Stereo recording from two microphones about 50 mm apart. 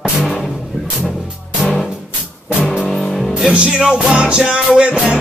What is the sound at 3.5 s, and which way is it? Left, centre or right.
Music, right.